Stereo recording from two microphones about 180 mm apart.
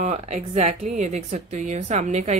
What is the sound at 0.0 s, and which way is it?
Speech, 35° right (ahead or behind).